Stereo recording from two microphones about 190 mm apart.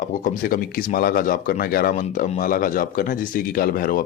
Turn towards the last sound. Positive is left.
turn(degrees=50)  # may be behind; listen again after turning